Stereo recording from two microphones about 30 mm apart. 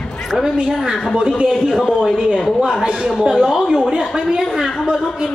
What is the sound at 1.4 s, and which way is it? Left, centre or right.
A man's voice, right.